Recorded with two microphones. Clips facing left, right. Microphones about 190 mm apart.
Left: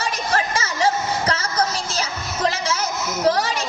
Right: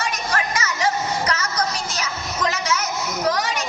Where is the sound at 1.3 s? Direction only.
30° left (ahead or behind).